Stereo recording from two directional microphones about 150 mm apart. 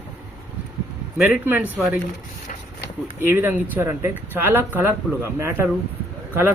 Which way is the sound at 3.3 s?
15° right (ahead or behind).